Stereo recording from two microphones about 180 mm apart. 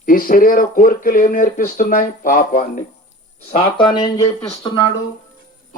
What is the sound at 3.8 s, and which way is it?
Speech, 25° left (ahead or behind).